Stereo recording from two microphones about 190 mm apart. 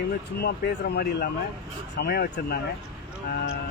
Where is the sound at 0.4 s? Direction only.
60° left (ahead or behind).